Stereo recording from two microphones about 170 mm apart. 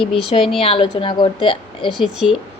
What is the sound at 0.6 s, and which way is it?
A woman's voice, 35° left (ahead or behind).